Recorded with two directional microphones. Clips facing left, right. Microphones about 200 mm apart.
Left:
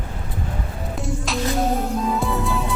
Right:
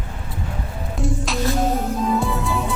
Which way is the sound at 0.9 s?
Centre (ahead or behind).